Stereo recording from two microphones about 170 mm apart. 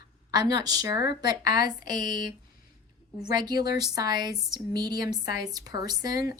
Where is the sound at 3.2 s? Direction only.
25° right (ahead or behind).